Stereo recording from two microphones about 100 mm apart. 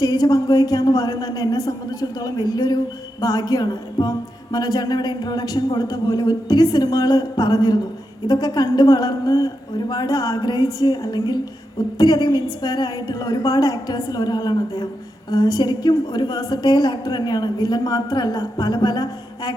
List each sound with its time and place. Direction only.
0.0 s a man's voice: 40° left (ahead or behind)